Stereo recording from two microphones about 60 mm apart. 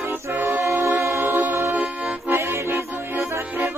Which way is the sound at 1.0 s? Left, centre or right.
Right.